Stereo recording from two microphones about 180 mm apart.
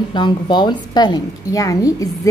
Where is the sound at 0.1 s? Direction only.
25° left (ahead or behind).